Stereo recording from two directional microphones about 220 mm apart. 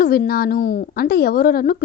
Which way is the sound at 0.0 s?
40° left (ahead or behind).